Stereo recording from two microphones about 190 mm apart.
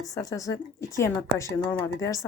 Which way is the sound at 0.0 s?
20° left (ahead or behind).